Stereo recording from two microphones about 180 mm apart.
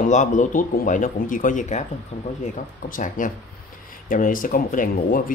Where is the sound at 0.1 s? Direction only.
40° left (ahead or behind).